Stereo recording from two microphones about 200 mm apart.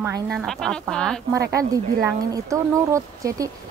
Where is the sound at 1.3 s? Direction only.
15° right (ahead or behind).